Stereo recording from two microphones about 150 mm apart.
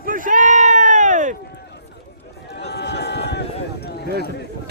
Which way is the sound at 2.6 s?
90° left.